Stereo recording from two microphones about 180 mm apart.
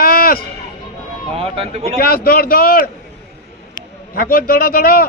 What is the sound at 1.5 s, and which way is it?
Speech, 35° right (ahead or behind).